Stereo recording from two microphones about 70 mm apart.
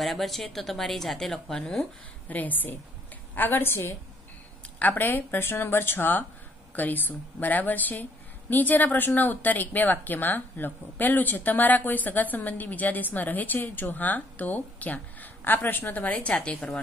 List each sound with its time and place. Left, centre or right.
0.0 s a woman's voice: centre
2.2 s a woman's voice: left